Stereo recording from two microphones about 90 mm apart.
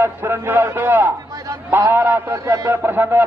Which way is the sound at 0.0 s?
25° right (ahead or behind).